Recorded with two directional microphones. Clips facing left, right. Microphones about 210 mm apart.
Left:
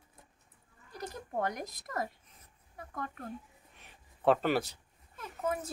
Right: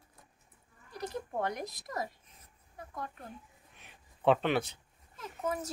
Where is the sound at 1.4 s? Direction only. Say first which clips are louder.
Even; 45° left (ahead or behind).